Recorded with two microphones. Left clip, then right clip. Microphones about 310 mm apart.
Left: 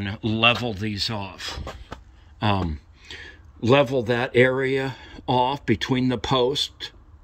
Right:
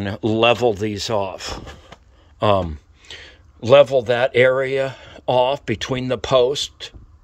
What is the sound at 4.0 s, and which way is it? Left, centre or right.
Speech, centre.